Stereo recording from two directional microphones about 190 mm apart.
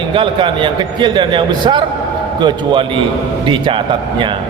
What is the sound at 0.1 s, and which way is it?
A man's voice, 25° right (ahead or behind).